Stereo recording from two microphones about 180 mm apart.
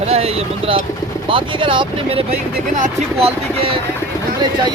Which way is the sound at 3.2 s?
35° right (ahead or behind).